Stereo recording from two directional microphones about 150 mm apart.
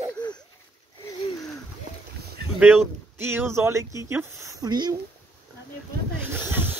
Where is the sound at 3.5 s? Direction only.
20° right (ahead or behind).